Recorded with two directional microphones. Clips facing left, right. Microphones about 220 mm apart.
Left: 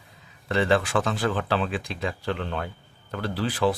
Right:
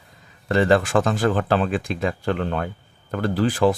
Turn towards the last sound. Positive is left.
turn(degrees=-45)  # may be behind; listen again after turning